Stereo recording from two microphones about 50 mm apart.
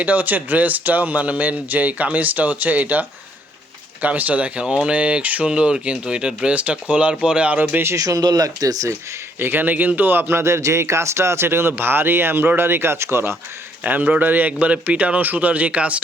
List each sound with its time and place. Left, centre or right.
0.0 s speech: right
7.8 s speech: right
9.4 s speech: right
13.8 s speech: right